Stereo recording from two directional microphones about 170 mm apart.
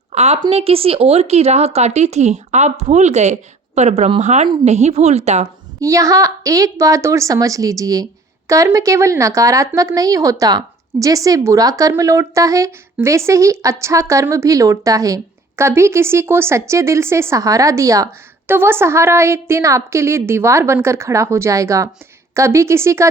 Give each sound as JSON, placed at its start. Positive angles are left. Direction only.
{"t": 0.1, "sound": "a sound", "side_deg": -40}
{"t": 0.4, "sound": "speech", "side_deg": -35}
{"t": 5.8, "sound": "a woman's voice", "side_deg": -20}